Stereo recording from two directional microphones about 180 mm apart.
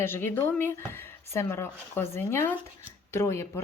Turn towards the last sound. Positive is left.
turn(degrees=15)  # may be behind; listen again after turning